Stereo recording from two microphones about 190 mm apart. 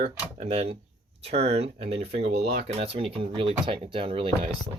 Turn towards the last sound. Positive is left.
turn(degrees=-30)  # may be behind; listen again after turning